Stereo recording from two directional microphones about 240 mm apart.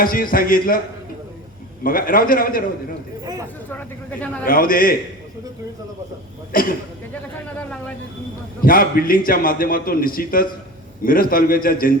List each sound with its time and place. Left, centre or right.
0.0 s a man's voice: left
1.8 s a man's voice: left
3.7 s speech: centre
4.4 s a man's voice: left
6.5 s a man's voice: left
8.6 s a man's voice: left